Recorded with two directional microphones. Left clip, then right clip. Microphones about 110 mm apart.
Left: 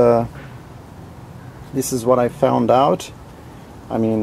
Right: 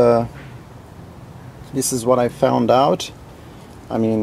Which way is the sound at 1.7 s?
10° right (ahead or behind).